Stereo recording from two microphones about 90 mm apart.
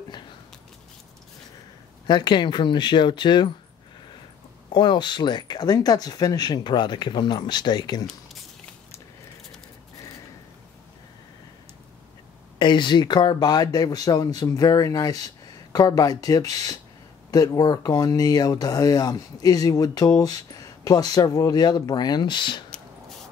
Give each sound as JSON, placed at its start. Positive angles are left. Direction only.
{"t": 2.0, "sound": "speech", "side_deg": 55}
{"t": 4.7, "sound": "speech", "side_deg": 60}
{"t": 12.5, "sound": "speech", "side_deg": 60}